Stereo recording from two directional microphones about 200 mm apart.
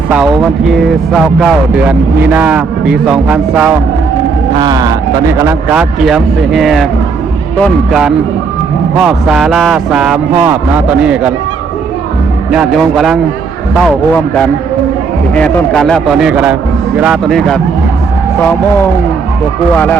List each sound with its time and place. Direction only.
0.7 s speech: centre (ahead or behind)
4.5 s speech: 20° right (ahead or behind)
6.1 s speech: centre (ahead or behind)
12.5 s speech: 5° right (ahead or behind)
19.7 s speech: 10° left (ahead or behind)